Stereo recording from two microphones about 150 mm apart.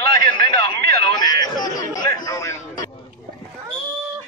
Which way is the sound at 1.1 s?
25° left (ahead or behind).